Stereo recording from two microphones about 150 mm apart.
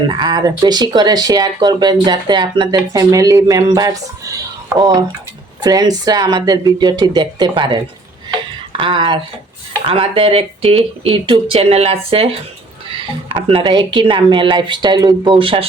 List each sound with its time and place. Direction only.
0.1 s speech: 30° right (ahead or behind)
8.8 s speech: 35° right (ahead or behind)